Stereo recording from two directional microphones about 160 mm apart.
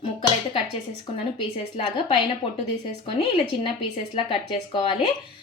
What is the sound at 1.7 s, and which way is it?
A woman's voice, 30° left (ahead or behind).